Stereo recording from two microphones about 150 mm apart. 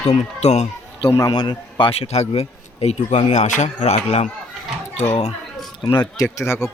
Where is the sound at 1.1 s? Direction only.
25° left (ahead or behind).